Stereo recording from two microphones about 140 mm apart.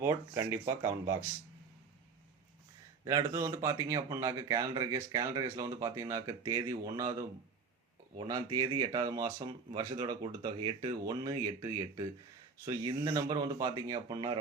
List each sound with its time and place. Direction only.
0.0 s speech: 20° right (ahead or behind)
3.0 s speech: 25° right (ahead or behind)